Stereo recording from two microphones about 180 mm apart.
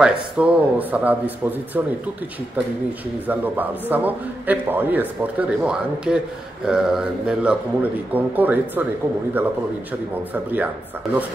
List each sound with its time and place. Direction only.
0.0 s a man's voice: 5° right (ahead or behind)
3.3 s a man's voice: 10° right (ahead or behind)
10.3 s a man's voice: 10° right (ahead or behind)